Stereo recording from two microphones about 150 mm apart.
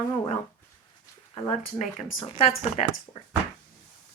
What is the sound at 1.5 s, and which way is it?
A woman's voice, 45° left (ahead or behind).